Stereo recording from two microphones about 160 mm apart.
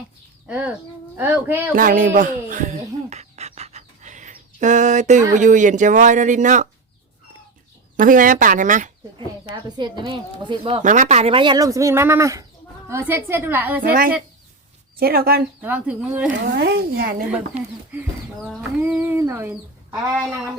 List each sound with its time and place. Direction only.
0.4 s a woman's voice: 5° right (ahead or behind)
1.7 s a sound: 60° right (ahead or behind)
7.9 s speech: 55° right (ahead or behind)
9.6 s speech: 25° right (ahead or behind)
10.8 s a woman's voice: 50° right (ahead or behind); by 13.8 s 10° right (ahead or behind)
13.8 s speech: 70° right (ahead or behind)
15.6 s a woman's voice: 10° right (ahead or behind)
16.6 s speech: 90° right; by 17.2 s 65° right (ahead or behind)
17.5 s speech: 40° right (ahead or behind)
18.8 s a sound: 10° right (ahead or behind)